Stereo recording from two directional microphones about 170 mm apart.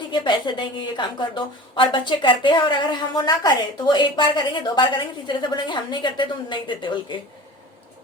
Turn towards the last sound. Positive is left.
turn(degrees=25)  # may be behind; listen again after turning